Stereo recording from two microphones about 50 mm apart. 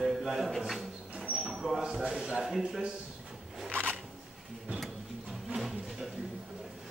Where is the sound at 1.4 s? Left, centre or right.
Centre.